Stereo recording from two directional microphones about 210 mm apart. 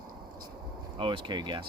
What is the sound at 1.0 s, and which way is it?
Speech, 20° right (ahead or behind).